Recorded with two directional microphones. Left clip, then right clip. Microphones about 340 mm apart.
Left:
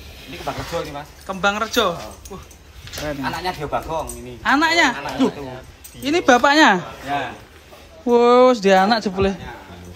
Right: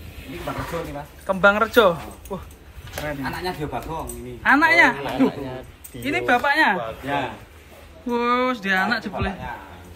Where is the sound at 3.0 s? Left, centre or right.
Centre.